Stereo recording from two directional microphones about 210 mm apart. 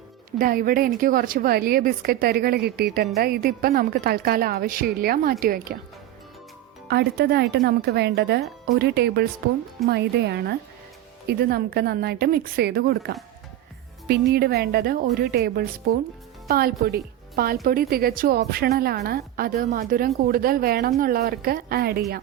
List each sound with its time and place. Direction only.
0.3 s a woman's voice: 45° right (ahead or behind)
6.8 s a woman's voice: 50° right (ahead or behind)